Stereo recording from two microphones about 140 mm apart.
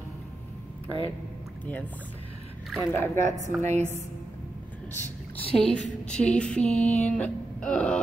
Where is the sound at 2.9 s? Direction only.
15° left (ahead or behind).